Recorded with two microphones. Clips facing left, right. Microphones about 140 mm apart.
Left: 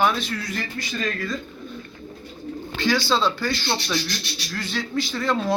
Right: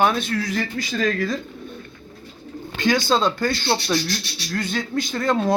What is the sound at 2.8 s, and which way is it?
Speech, 50° right (ahead or behind).